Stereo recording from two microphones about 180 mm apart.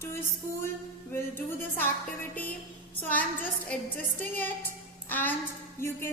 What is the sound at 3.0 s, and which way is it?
A woman's voice, 10° left (ahead or behind).